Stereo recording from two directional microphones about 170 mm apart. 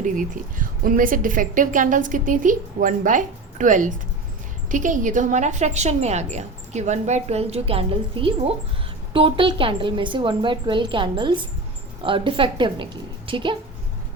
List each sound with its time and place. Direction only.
0.0 s a woman's voice: 55° right (ahead or behind); by 13.6 s 30° right (ahead or behind)